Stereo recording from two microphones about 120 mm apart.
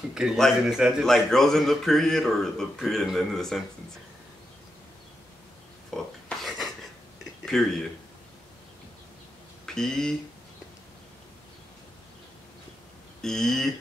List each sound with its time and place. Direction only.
0.1 s a man's voice: 5° right (ahead or behind)
5.9 s a sound: centre (ahead or behind)
7.6 s a man's voice: 5° left (ahead or behind)
9.8 s a man's voice: 5° left (ahead or behind)
13.2 s a man's voice: 5° left (ahead or behind)